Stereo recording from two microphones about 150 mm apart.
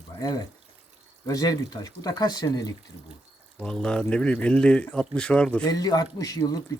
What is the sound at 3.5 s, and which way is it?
Speech, 5° left (ahead or behind).